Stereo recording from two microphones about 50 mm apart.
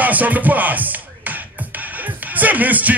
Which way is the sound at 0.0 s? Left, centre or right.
Right.